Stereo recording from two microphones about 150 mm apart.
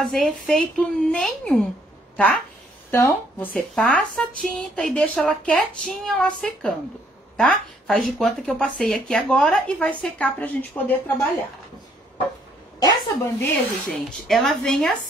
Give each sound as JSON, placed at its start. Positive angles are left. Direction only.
{"t": 0.0, "sound": "a woman's voice", "side_deg": 5}
{"t": 12.8, "sound": "a woman's voice", "side_deg": 20}
{"t": 13.8, "sound": "speech", "side_deg": 5}